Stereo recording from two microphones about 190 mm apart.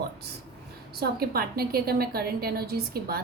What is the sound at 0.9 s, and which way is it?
A woman's voice, 55° right (ahead or behind).